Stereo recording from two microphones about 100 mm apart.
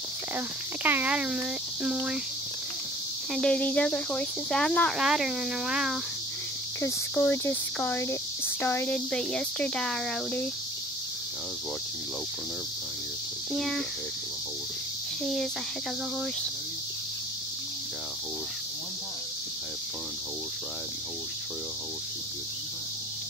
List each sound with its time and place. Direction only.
0.8 s speech: 15° right (ahead or behind)
3.3 s speech: 10° left (ahead or behind)
4.9 s speech: 5° right (ahead or behind)
7.2 s speech: 20° left (ahead or behind)
13.5 s speech: centre (ahead or behind)